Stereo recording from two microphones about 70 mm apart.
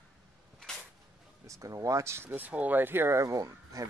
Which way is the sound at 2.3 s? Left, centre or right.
Right.